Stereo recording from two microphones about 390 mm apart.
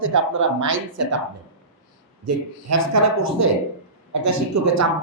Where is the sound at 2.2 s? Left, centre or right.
Right.